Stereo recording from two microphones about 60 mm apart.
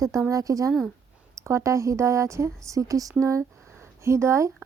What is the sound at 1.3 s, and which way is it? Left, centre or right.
Speech, right.